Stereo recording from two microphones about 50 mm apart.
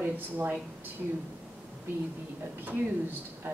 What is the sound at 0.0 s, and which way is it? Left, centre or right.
Speech, right.